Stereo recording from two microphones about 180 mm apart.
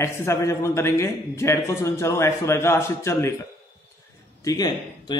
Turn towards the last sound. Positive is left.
turn(degrees=25)  # may be behind; listen again after turning